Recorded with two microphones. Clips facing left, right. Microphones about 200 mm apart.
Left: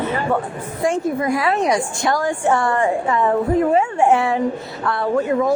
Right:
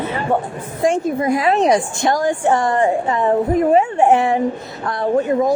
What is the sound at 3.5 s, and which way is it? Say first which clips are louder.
Speech: right 2 dB; 20° right (ahead or behind).